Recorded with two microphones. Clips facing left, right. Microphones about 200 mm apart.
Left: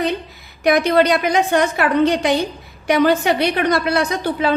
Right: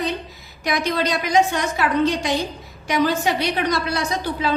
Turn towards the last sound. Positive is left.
turn(degrees=60)  # may be behind; listen again after turning